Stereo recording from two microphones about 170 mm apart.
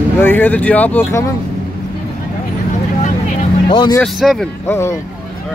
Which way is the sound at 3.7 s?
25° left (ahead or behind).